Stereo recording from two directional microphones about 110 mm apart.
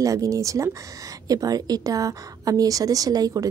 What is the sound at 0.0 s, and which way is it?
Speech, 30° right (ahead or behind).